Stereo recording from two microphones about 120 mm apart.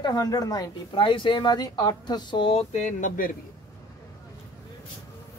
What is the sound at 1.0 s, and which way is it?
Speech, 45° left (ahead or behind).